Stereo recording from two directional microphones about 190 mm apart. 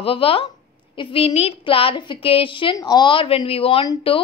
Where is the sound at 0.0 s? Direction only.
30° left (ahead or behind).